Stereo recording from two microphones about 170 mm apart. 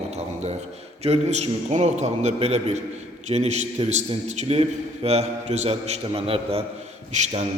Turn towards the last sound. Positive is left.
turn(degrees=-45)  # may be behind; listen again after turning